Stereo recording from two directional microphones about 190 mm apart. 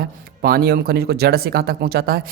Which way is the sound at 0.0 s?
55° right (ahead or behind).